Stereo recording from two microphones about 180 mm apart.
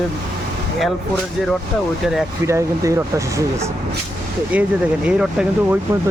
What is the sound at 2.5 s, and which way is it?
Speech, 15° right (ahead or behind).